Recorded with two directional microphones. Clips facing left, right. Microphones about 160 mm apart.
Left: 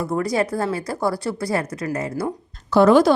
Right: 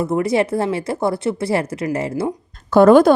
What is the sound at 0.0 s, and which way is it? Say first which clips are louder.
A woman's voice: right 4 dB; 25° right (ahead or behind).